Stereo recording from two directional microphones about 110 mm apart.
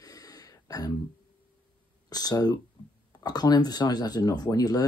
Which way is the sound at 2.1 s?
35° left (ahead or behind).